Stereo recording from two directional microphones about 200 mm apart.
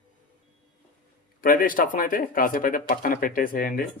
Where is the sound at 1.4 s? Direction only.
45° left (ahead or behind).